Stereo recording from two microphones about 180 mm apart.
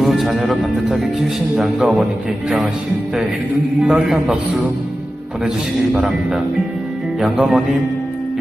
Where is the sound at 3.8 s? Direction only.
5° right (ahead or behind).